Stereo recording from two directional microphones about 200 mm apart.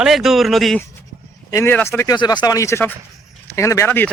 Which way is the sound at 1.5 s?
10° left (ahead or behind).